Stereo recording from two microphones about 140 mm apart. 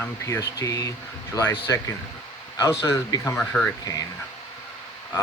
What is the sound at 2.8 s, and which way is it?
Speech, 25° left (ahead or behind).